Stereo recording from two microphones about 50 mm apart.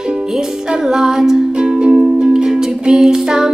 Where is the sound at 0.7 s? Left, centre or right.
Centre.